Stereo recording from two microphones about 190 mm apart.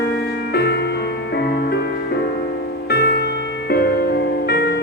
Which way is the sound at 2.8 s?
55° left (ahead or behind).